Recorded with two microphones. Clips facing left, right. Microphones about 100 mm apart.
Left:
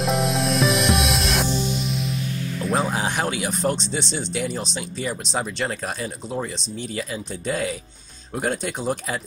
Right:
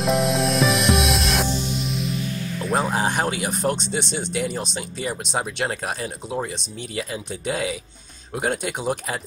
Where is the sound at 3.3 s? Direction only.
50° right (ahead or behind).